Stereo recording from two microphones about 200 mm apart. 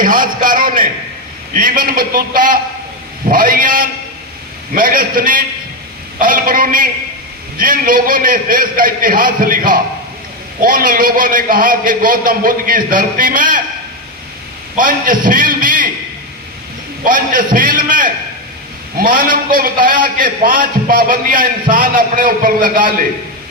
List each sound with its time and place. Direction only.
0.0 s a sound: 45° right (ahead or behind)
1.5 s a man's voice: 45° right (ahead or behind)
14.8 s a man's voice: 45° right (ahead or behind)
17.1 s a man's voice: 45° right (ahead or behind)